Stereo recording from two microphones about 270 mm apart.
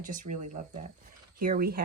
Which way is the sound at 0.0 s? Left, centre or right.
Right.